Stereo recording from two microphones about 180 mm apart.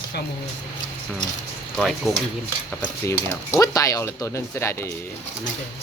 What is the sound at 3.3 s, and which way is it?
Speech, 20° left (ahead or behind).